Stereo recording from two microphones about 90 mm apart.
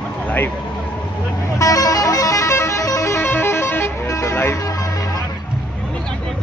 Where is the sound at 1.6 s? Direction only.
40° left (ahead or behind).